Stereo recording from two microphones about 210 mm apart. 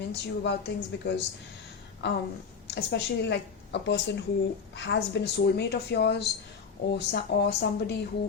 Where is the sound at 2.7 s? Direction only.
55° left (ahead or behind).